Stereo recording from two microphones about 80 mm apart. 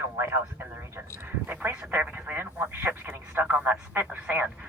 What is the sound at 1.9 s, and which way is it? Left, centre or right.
Telephone, centre.